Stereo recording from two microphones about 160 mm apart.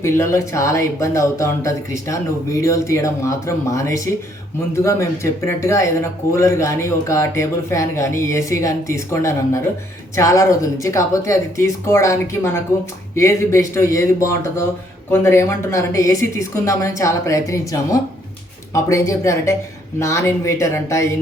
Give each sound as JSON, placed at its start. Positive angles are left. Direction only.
{"t": 0.0, "sound": "speech", "side_deg": 20}